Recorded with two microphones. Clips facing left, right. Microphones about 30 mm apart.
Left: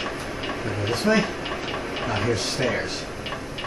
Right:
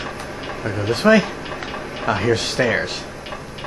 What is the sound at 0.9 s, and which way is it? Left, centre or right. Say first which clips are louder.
Speech: right 7 dB; right.